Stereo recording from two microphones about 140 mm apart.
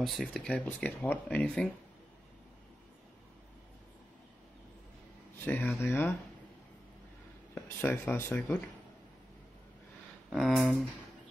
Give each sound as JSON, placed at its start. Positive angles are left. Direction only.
{"t": 0.0, "sound": "speech", "side_deg": 0}
{"t": 5.4, "sound": "speech", "side_deg": 15}
{"t": 7.6, "sound": "speech", "side_deg": 20}
{"t": 10.3, "sound": "speech", "side_deg": 0}